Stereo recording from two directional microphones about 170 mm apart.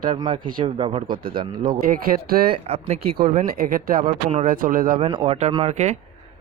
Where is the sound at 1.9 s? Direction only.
60° right (ahead or behind).